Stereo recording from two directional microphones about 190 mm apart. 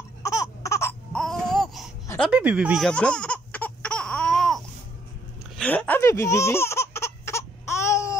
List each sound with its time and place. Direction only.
0.2 s a sound: 15° left (ahead or behind)
1.1 s baby cry: centre (ahead or behind)
2.1 s baby laughter: 5° right (ahead or behind)
5.6 s baby laughter: 10° left (ahead or behind)